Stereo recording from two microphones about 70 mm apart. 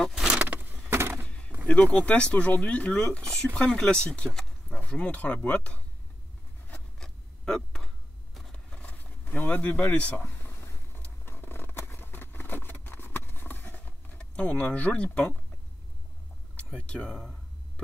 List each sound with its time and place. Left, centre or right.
0.1 s vehicle: centre
0.4 s vehicle: right
0.8 s a sound: right
1.7 s speech: centre
7.0 s a sound: centre
8.8 s speech: left
10.2 s a sound: left
11.2 s vehicle: left; by 15.3 s centre
16.5 s speech: centre